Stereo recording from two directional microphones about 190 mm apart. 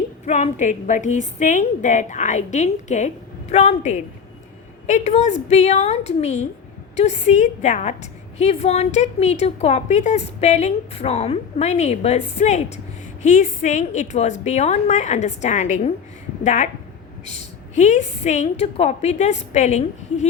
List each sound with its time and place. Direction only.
0.3 s a woman's voice: 40° left (ahead or behind)